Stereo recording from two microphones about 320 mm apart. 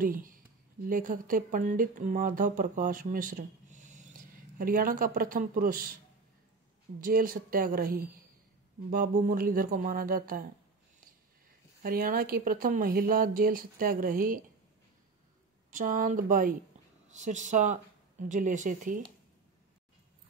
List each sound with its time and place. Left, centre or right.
0.0 s speech: right
7.0 s speech: right
11.8 s speech: right
15.7 s speech: right